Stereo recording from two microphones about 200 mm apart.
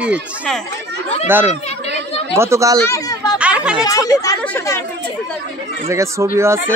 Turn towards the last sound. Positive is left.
turn(degrees=-15)  # may be behind; listen again after turning